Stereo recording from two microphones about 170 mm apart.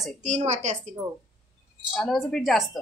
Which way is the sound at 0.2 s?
45° right (ahead or behind).